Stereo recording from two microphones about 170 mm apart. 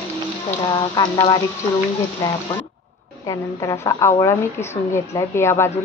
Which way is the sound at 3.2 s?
20° left (ahead or behind).